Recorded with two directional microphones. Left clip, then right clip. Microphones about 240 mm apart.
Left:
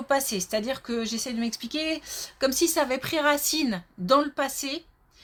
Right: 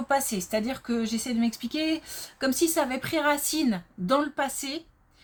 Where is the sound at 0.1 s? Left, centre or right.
Left.